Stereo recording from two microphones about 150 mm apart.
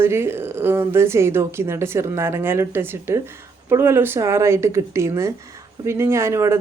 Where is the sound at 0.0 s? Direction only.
15° right (ahead or behind).